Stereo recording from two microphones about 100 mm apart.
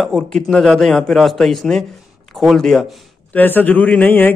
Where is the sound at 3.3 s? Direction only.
20° left (ahead or behind).